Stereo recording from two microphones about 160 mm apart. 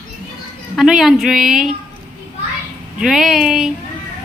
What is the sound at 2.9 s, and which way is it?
Speech, centre (ahead or behind).